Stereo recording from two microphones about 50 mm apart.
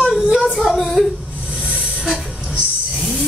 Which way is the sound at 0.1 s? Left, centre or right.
Centre.